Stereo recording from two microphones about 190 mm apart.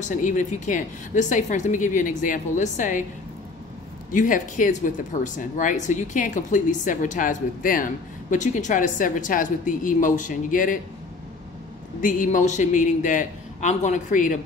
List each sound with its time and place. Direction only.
0.0 s a woman's voice: 40° left (ahead or behind)
4.1 s speech: 45° left (ahead or behind)
12.0 s a woman's voice: 45° left (ahead or behind)